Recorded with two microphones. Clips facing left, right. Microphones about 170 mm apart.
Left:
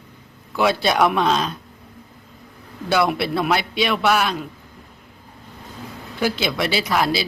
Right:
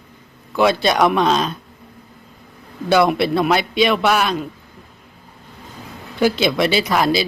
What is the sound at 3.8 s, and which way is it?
Speech, 20° right (ahead or behind).